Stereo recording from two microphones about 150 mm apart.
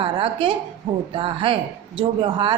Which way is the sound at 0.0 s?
35° right (ahead or behind).